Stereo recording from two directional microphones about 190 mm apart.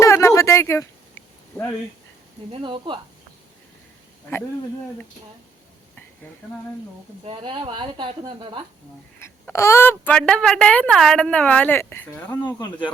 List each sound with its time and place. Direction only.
0.0 s a sound: 15° left (ahead or behind)
2.5 s a woman's voice: 25° right (ahead or behind)
7.3 s a woman's voice: 25° right (ahead or behind)
9.1 s speech: 15° left (ahead or behind)